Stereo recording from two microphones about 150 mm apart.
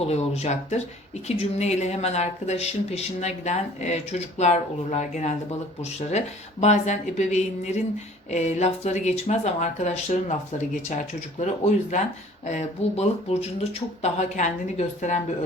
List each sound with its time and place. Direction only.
0.0 s speech: 45° left (ahead or behind)